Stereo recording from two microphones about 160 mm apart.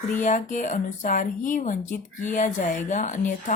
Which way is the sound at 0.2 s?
50° left (ahead or behind).